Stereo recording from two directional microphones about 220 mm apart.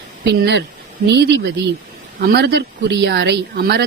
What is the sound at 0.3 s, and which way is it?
Speech, 50° right (ahead or behind).